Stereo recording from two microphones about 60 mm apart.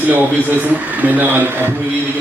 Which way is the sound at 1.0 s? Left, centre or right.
Right.